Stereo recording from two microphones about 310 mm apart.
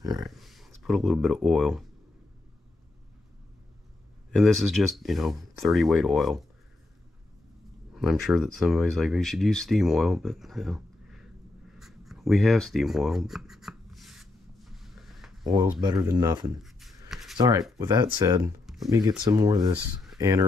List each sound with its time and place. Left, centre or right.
0.0 s speech: centre
0.3 s speech: centre
4.4 s speech: centre
7.9 s speech: centre
11.8 s a sound: centre
15.4 s speech: centre
16.6 s a sound: centre
17.4 s speech: centre
18.7 s a sound: centre
18.9 s speech: centre